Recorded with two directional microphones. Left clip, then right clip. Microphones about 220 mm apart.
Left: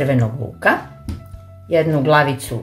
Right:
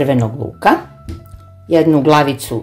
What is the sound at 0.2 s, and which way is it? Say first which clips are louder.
Speech: right 4 dB; 25° right (ahead or behind).